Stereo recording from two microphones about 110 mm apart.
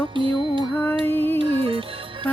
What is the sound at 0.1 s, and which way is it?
Speech, 50° right (ahead or behind).